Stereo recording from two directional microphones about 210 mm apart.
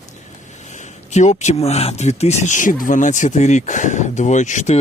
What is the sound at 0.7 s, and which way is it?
Speech, 35° left (ahead or behind).